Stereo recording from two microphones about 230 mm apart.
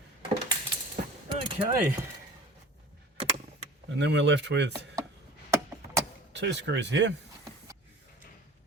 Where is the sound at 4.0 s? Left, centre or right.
Right.